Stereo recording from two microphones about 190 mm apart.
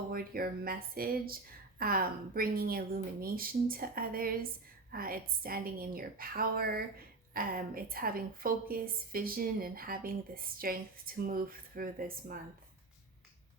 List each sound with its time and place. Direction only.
0.1 s a woman's voice: 50° right (ahead or behind)